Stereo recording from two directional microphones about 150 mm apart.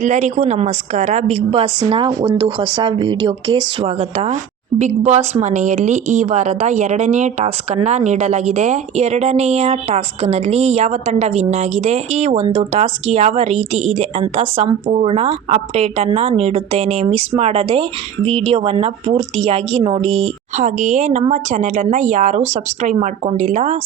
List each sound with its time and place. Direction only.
0.0 s a woman's voice: 55° right (ahead or behind)
20.6 s a woman's voice: 55° right (ahead or behind)